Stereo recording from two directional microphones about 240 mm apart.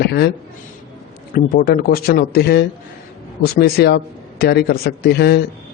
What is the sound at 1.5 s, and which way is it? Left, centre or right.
A man's voice, left.